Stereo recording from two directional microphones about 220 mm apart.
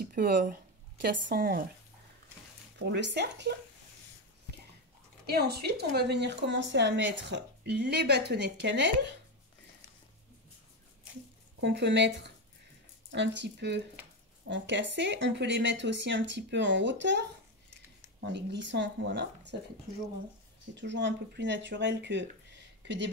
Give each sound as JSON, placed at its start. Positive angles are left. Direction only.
{"t": 0.0, "sound": "speech", "side_deg": -40}
{"t": 2.8, "sound": "a woman's voice", "side_deg": -50}
{"t": 5.3, "sound": "a woman's voice", "side_deg": -45}
{"t": 11.6, "sound": "a woman's voice", "side_deg": -50}
{"t": 18.2, "sound": "a woman's voice", "side_deg": -50}
{"t": 20.7, "sound": "a woman's voice", "side_deg": -55}